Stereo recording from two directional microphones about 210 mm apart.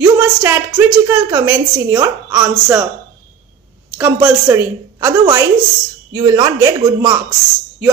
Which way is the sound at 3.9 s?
5° right (ahead or behind).